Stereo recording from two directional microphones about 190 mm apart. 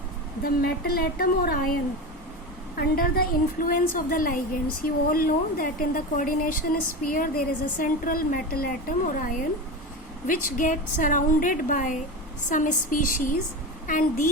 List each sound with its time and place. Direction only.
0.4 s a woman's voice: 50° left (ahead or behind)
2.7 s a woman's voice: 55° left (ahead or behind)